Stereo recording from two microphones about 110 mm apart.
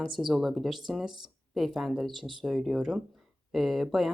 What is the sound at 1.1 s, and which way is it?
Speech, 45° right (ahead or behind).